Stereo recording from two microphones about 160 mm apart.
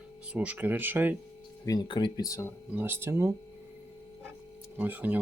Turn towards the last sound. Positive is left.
turn(degrees=-10)  # may be behind; listen again after turning